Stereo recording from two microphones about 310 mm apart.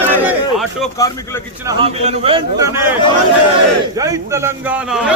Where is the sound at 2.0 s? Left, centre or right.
Centre.